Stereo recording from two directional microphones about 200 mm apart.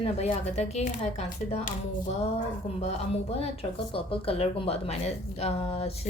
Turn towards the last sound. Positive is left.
turn(degrees=30)  # may be behind; listen again after turning